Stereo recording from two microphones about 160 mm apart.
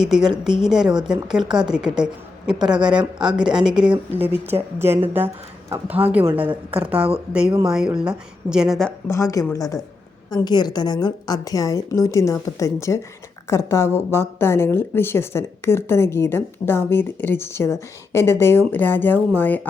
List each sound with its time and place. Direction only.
0.0 s a woman's voice: 5° right (ahead or behind)
9.0 s a woman's voice: 20° left (ahead or behind)